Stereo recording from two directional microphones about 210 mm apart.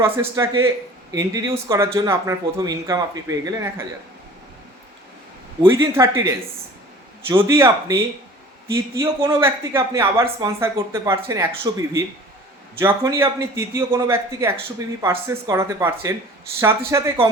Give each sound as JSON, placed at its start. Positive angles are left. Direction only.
{"t": 0.0, "sound": "speech", "side_deg": -15}
{"t": 5.6, "sound": "speech", "side_deg": -15}